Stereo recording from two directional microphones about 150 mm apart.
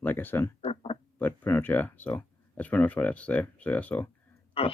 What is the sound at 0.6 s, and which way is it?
Speech, 40° left (ahead or behind).